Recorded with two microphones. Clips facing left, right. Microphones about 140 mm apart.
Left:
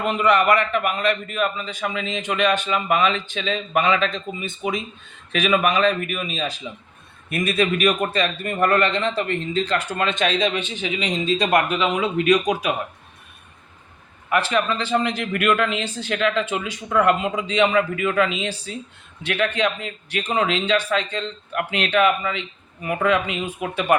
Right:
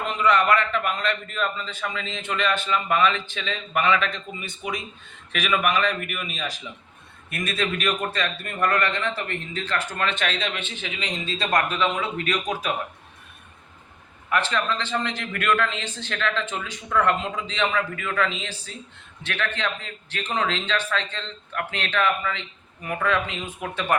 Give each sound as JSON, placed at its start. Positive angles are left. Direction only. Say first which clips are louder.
{"t": 0.2, "sound": "a man's voice", "louder": "left 2 dB", "side_deg": 10}
{"t": 14.3, "sound": "a man's voice", "louder": "left 4 dB", "side_deg": 10}